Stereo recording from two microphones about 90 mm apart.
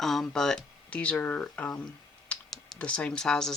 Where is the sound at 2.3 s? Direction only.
10° left (ahead or behind).